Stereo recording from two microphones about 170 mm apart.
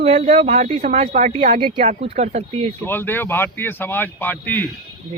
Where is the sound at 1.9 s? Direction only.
50° right (ahead or behind).